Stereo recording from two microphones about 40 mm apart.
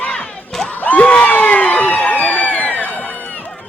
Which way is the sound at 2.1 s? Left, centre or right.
Left.